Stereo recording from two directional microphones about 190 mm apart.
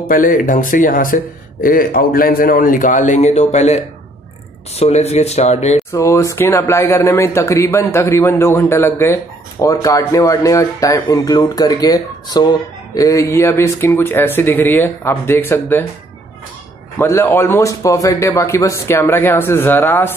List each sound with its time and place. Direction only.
0.1 s speech: 45° left (ahead or behind)
5.9 s speech: 15° left (ahead or behind)
17.0 s speech: 10° left (ahead or behind)